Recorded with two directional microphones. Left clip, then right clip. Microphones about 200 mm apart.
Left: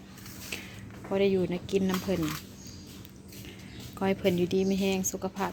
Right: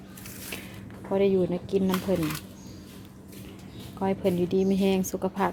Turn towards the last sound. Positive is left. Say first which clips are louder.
# right 4 dB
turn(degrees=-20)  # may be behind; listen again after turning